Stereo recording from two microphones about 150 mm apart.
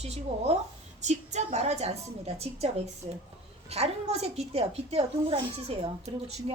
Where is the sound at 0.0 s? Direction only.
45° right (ahead or behind).